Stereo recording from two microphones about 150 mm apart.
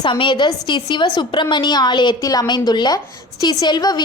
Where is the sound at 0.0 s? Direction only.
35° left (ahead or behind).